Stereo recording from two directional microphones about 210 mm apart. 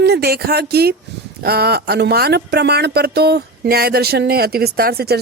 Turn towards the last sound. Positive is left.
turn(degrees=-45)  # may be behind; listen again after turning